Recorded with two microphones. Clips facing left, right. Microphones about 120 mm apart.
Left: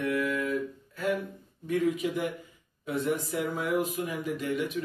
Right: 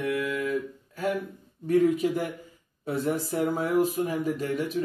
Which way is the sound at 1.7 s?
40° right (ahead or behind).